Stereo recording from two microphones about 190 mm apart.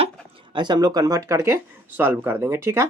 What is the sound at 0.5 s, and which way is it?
Speech, 25° right (ahead or behind).